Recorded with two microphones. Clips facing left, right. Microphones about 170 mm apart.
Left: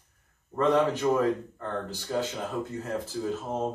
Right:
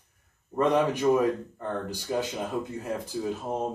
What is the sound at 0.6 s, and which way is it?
Speech, 15° right (ahead or behind).